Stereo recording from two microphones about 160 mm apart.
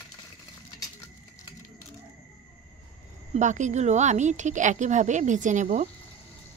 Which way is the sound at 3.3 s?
50° right (ahead or behind).